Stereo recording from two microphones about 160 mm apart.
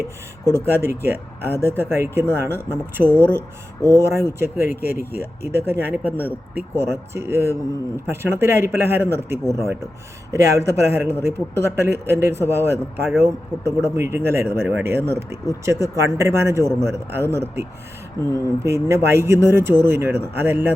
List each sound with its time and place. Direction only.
0.0 s speech: 15° right (ahead or behind)